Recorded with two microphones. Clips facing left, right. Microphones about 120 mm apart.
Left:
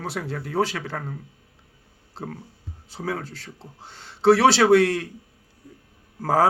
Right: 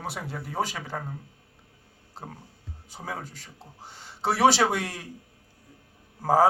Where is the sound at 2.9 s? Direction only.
15° right (ahead or behind).